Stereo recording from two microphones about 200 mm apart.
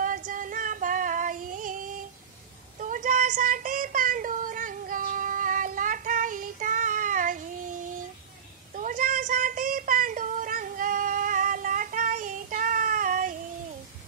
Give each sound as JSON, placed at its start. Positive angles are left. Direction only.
{"t": 0.0, "sound": "female singing", "side_deg": -40}
{"t": 2.8, "sound": "child singing", "side_deg": -40}
{"t": 8.7, "sound": "child singing", "side_deg": -40}